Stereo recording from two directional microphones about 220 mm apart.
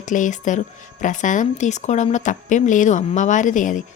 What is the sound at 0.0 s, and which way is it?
A woman's voice, 35° left (ahead or behind).